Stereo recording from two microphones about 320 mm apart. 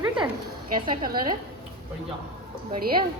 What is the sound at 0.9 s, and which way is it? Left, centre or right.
Speech, right.